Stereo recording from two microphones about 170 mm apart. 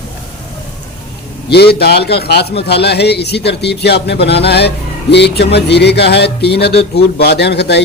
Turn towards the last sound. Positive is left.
turn(degrees=85)